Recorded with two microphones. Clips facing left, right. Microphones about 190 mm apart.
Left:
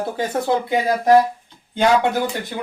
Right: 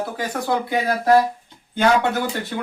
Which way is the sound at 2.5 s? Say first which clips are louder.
Right 1 dB; 20° left (ahead or behind).